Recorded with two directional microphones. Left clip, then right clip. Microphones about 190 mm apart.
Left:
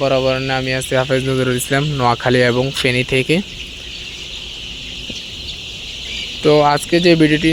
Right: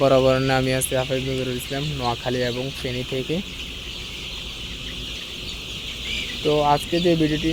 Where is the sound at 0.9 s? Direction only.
30° left (ahead or behind).